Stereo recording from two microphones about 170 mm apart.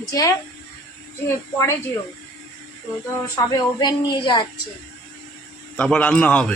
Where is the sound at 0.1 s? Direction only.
20° left (ahead or behind).